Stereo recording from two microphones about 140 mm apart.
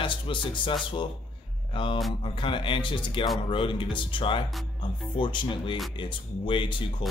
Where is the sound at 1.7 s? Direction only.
35° left (ahead or behind).